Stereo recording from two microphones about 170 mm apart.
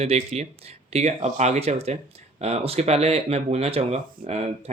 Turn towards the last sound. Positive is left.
turn(degrees=-35)  # may be behind; listen again after turning